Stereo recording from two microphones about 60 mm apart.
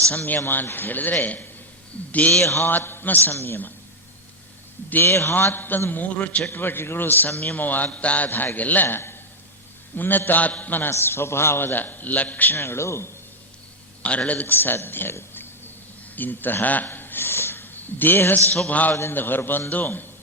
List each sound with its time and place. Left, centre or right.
0.2 s a man's voice: left
2.4 s a man's voice: left
5.0 s a man's voice: left
6.5 s a man's voice: left
8.3 s a man's voice: left
10.9 s a man's voice: left
14.0 s a man's voice: left
14.4 s a man's voice: left